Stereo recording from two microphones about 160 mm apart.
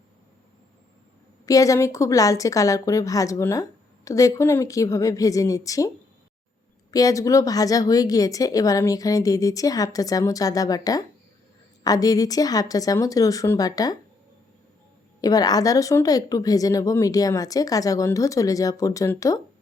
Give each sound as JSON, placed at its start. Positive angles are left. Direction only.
{"t": 1.5, "sound": "a woman's voice", "side_deg": 20}
{"t": 6.9, "sound": "a woman's voice", "side_deg": 20}
{"t": 15.2, "sound": "a woman's voice", "side_deg": 25}